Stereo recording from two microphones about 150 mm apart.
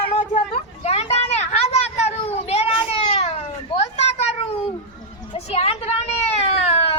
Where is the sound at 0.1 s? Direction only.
45° left (ahead or behind).